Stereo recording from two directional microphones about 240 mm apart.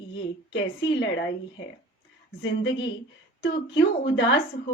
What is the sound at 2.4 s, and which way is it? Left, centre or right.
Speech, left.